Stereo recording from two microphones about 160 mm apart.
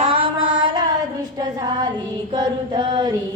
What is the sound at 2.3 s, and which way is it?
Chant, 30° right (ahead or behind).